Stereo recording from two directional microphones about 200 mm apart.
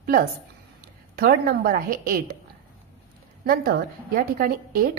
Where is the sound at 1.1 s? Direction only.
55° right (ahead or behind).